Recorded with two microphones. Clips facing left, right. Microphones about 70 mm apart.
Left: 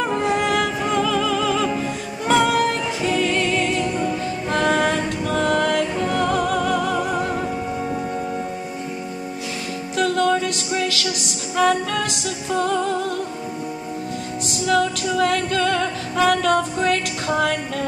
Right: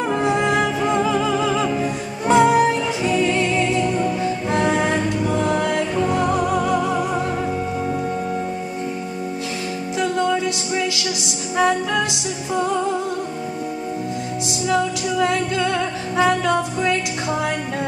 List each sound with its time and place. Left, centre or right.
0.1 s music: right
9.9 s music: right
11.5 s music: right
14.7 s music: left
15.6 s music: right